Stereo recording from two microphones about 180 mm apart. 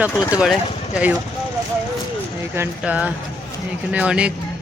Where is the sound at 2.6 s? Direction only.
10° right (ahead or behind).